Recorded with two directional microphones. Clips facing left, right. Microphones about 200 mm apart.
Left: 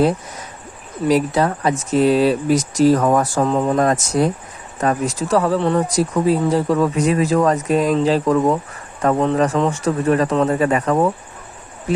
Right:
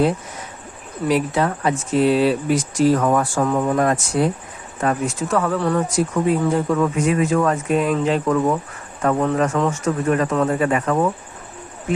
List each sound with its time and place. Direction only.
1.0 s speech: 40° left (ahead or behind)
3.4 s speech: 25° left (ahead or behind)
3.8 s speech: 40° left (ahead or behind)
5.5 s speech: 20° left (ahead or behind)
5.9 s speech: 35° left (ahead or behind)
9.6 s speech: 30° left (ahead or behind)